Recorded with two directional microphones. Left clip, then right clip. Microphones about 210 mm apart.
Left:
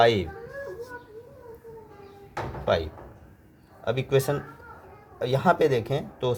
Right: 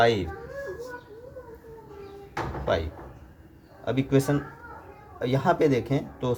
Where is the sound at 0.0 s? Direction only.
55° left (ahead or behind).